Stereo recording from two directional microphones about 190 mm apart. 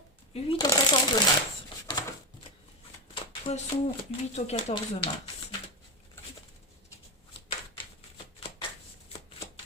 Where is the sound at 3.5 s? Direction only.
35° left (ahead or behind).